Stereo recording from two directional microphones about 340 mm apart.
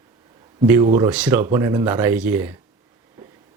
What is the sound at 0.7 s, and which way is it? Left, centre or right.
Speech, centre.